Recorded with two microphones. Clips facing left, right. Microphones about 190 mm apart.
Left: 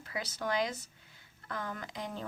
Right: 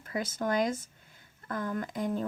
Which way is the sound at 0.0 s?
50° right (ahead or behind).